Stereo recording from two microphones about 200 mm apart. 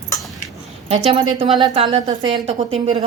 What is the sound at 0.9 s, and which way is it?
A woman's voice, 30° right (ahead or behind).